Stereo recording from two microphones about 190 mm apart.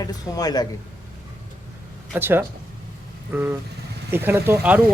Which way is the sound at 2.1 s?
10° right (ahead or behind).